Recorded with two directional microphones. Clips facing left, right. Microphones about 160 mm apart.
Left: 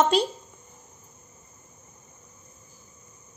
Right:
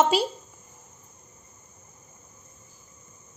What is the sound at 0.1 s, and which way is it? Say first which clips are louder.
Speech: left 1 dB; 5° right (ahead or behind).